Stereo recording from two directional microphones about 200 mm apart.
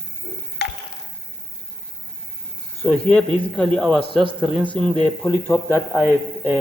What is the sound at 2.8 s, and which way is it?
Speech, 5° left (ahead or behind).